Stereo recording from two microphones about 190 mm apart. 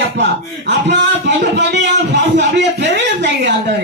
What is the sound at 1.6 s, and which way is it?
Speech, 65° right (ahead or behind).